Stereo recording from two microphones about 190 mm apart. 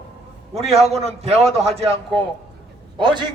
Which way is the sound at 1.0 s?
35° right (ahead or behind).